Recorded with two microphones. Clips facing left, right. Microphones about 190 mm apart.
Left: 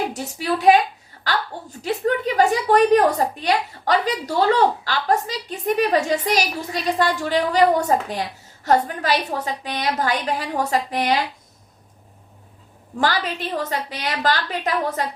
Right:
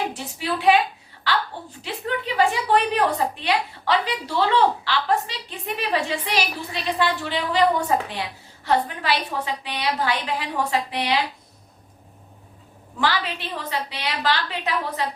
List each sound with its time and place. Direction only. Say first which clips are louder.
0.1 s a woman's voice: left 4 dB; 40° left (ahead or behind)
13.0 s a woman's voice: left 2 dB; 40° left (ahead or behind)